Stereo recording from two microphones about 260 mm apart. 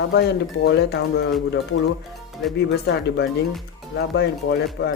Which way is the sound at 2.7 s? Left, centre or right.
Left.